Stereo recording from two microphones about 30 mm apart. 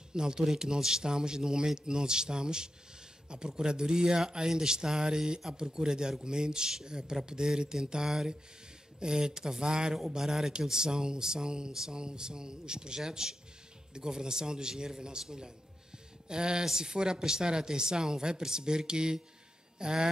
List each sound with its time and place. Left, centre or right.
0.1 s a man's voice: right
10.1 s speech: centre